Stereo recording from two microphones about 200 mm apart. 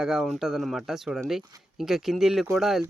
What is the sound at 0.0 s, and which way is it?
Speech, centre (ahead or behind).